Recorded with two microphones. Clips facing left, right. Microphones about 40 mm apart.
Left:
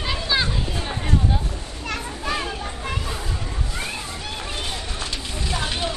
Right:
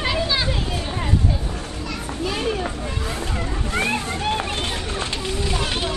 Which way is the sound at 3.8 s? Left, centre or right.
Right.